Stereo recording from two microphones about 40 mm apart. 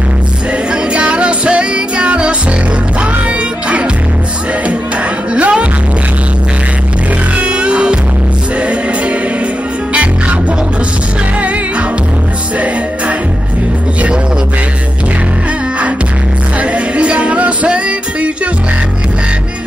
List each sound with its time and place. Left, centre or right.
0.7 s music: right
5.3 s music: right
7.3 s music: right
16.5 s music: right